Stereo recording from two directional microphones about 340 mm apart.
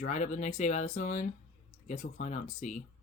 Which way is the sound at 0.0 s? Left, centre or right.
Left.